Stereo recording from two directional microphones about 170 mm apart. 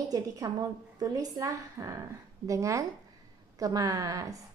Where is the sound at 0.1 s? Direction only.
20° right (ahead or behind).